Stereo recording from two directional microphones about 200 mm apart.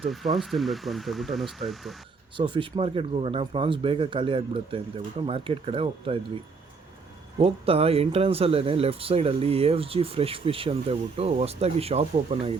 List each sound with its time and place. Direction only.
0.0 s speech: centre (ahead or behind)
2.3 s speech: 25° right (ahead or behind)
7.3 s speech: 30° right (ahead or behind)